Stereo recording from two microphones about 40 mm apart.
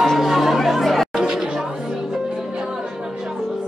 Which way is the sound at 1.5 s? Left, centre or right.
Centre.